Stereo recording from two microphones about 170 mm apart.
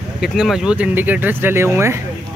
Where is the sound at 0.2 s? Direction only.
5° right (ahead or behind).